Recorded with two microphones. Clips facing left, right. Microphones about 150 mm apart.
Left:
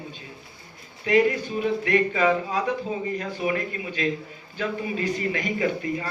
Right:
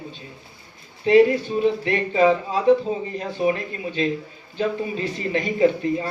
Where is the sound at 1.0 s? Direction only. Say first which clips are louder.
Right 6 dB; 30° right (ahead or behind).